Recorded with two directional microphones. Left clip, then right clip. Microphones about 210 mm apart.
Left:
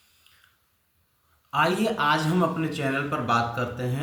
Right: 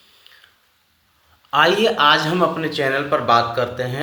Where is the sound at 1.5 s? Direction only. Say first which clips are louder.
Right 8 dB; 30° left (ahead or behind).